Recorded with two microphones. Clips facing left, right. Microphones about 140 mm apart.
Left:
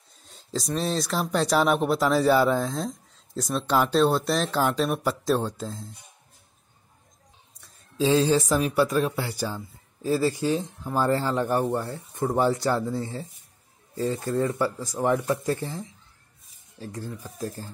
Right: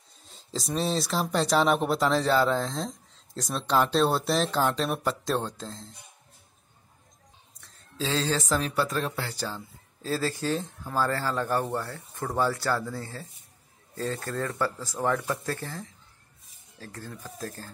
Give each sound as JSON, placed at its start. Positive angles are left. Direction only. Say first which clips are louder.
{"t": 0.3, "sound": "speech", "louder": "left 3 dB", "side_deg": 0}
{"t": 7.6, "sound": "speech", "louder": "left 8 dB", "side_deg": 15}